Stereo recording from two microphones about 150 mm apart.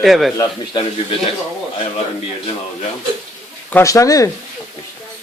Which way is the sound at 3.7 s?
20° left (ahead or behind).